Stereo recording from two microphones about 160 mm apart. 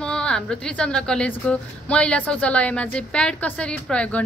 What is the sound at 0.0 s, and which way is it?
A woman's voice, 5° left (ahead or behind).